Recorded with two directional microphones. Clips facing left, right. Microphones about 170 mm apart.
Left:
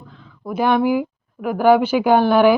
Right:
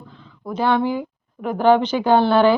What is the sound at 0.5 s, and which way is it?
A woman's voice, 10° left (ahead or behind).